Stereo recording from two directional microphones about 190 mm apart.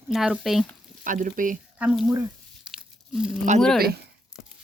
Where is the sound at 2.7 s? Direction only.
Centre (ahead or behind).